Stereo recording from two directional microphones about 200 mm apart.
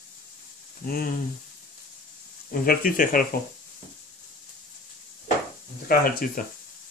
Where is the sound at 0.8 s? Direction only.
45° left (ahead or behind).